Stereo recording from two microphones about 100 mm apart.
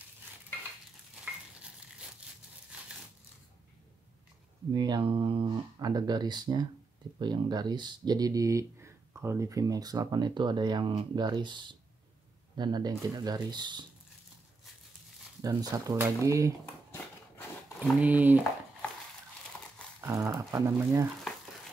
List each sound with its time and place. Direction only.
1.2 s stir: 10° right (ahead or behind)
4.7 s speech: 45° right (ahead or behind)
5.0 s a sound: 60° right (ahead or behind)
5.9 s speech: 45° right (ahead or behind)
15.4 s speech: 35° right (ahead or behind)
17.7 s speech: 15° right (ahead or behind)
20.0 s speech: 30° right (ahead or behind)